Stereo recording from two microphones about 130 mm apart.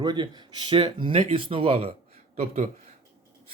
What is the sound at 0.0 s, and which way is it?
Speech, 35° right (ahead or behind).